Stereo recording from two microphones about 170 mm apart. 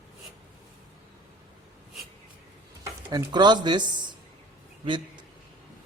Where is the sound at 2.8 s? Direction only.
25° right (ahead or behind).